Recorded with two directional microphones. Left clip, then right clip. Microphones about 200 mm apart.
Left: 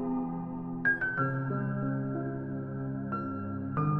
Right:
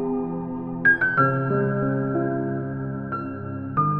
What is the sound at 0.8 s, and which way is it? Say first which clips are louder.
Music: right 11 dB; 30° right (ahead or behind).